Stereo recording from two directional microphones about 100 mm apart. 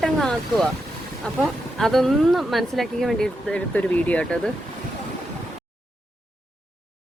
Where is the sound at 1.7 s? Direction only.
Centre (ahead or behind).